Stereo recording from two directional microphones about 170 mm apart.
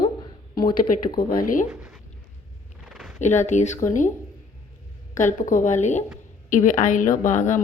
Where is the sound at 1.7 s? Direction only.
5° right (ahead or behind).